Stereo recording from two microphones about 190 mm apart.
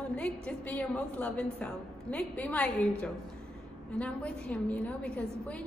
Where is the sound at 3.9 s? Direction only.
5° left (ahead or behind).